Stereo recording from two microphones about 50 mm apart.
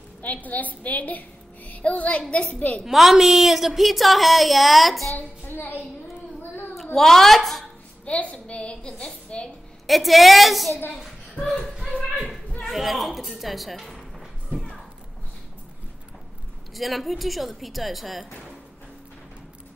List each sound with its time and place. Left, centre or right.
0.2 s a woman's voice: left
2.8 s a woman's voice: centre
5.5 s a child's voice: left
7.0 s a woman's voice: centre
8.0 s a woman's voice: left
9.8 s a woman's voice: centre
11.8 s a sound: centre
12.6 s a woman's voice: centre
14.5 s a sound: centre
16.7 s a woman's voice: centre